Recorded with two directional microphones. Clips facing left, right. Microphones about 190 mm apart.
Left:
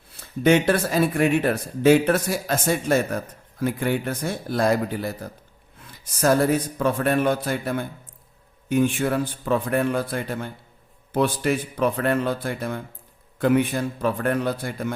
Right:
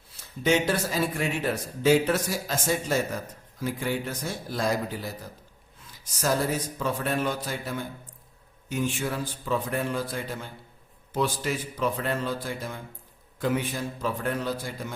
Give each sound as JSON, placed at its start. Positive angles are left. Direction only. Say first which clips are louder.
{"t": 0.2, "sound": "speech", "louder": "left 6 dB", "side_deg": 60}